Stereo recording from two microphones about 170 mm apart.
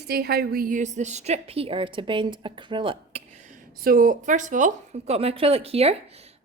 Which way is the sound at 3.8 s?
55° right (ahead or behind).